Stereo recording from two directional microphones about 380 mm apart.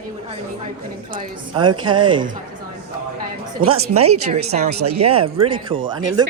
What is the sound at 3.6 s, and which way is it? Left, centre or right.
A woman's voice, right.